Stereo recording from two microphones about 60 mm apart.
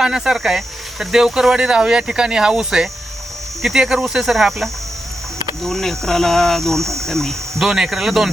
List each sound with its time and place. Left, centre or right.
0.0 s speech: centre
6.8 s cricket: right
7.1 s speech: centre
7.6 s speech: centre